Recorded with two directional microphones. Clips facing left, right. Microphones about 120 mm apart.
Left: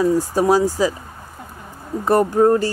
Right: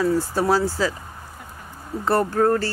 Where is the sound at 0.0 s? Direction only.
15° left (ahead or behind).